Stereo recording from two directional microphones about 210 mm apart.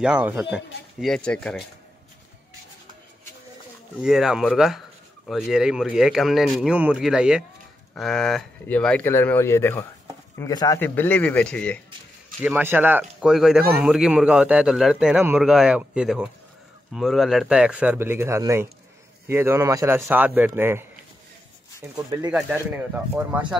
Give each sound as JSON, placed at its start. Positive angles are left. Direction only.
{"t": 0.0, "sound": "speech", "side_deg": -5}
{"t": 4.0, "sound": "speech", "side_deg": -5}
{"t": 12.4, "sound": "speech", "side_deg": -10}
{"t": 21.9, "sound": "speech", "side_deg": -20}
{"t": 22.3, "sound": "speech", "side_deg": -5}